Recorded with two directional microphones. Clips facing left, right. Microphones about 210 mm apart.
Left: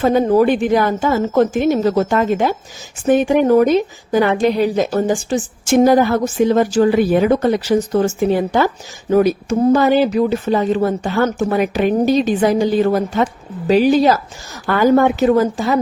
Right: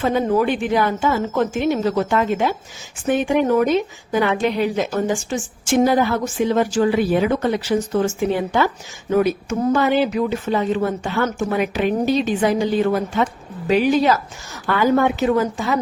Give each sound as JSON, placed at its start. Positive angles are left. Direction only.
{"t": 0.0, "sound": "speech", "side_deg": 40}